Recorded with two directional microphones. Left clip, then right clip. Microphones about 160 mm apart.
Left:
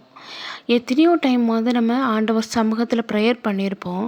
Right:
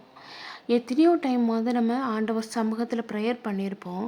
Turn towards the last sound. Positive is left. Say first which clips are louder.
# left 8 dB
turn(degrees=25)  # may be behind; listen again after turning